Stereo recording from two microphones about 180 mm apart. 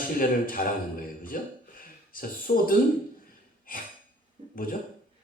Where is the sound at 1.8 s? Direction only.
50° left (ahead or behind).